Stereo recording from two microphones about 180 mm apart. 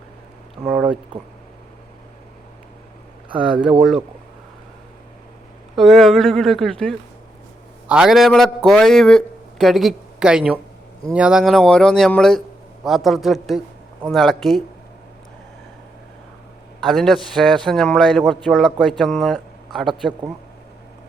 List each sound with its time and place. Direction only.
0.6 s a sound: 5° right (ahead or behind)
5.7 s a man's voice: centre (ahead or behind)
16.8 s a man's voice: centre (ahead or behind)